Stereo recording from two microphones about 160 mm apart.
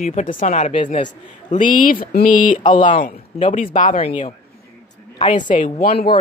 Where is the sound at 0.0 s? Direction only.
50° left (ahead or behind).